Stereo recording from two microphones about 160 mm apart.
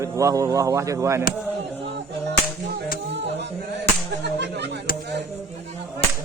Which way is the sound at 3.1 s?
90° right.